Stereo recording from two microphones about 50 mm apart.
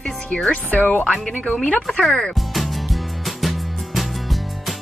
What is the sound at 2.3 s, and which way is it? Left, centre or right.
Music, centre.